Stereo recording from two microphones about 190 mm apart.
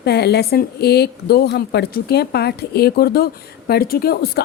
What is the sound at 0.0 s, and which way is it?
A woman's voice, 60° left (ahead or behind).